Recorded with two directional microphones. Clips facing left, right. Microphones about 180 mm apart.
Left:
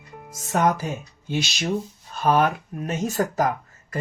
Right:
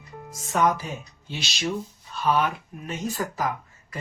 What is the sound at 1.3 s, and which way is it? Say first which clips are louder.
Speech: left 4 dB; 50° left (ahead or behind).